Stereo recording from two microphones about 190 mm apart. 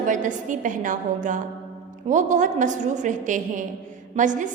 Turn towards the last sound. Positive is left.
turn(degrees=-40)  # may be behind; listen again after turning